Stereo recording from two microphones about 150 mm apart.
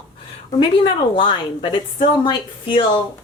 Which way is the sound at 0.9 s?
35° left (ahead or behind).